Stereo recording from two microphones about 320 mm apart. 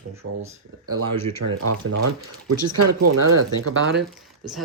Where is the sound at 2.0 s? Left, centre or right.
Right.